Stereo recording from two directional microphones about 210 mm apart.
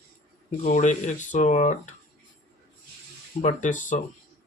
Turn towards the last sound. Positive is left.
turn(degrees=35)  # may be behind; listen again after turning